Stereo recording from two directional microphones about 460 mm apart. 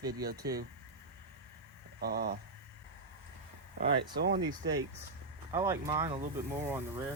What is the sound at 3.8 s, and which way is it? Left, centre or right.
Speech, right.